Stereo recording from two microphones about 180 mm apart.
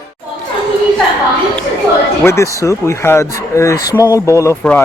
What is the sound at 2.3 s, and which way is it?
Speech, 15° left (ahead or behind).